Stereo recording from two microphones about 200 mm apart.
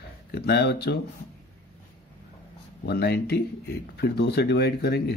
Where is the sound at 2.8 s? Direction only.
55° left (ahead or behind).